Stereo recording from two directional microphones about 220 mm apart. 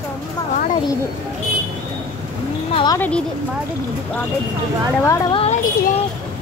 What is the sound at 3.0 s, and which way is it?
Speech, 5° left (ahead or behind).